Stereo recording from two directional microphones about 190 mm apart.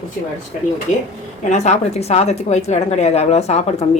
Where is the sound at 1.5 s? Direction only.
35° left (ahead or behind).